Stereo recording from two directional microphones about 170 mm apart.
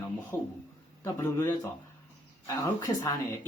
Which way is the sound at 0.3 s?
15° left (ahead or behind).